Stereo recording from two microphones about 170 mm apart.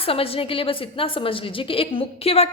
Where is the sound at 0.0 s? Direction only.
35° left (ahead or behind).